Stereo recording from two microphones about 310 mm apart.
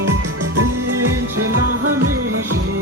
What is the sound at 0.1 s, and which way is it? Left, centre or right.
Music, right.